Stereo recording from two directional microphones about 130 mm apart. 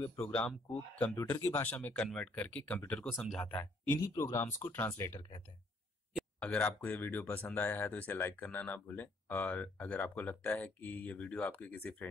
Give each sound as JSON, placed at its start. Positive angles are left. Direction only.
{"t": 0.2, "sound": "speech", "side_deg": 10}
{"t": 1.1, "sound": "speech", "side_deg": 25}
{"t": 1.6, "sound": "speech", "side_deg": 10}
{"t": 4.1, "sound": "speech", "side_deg": 25}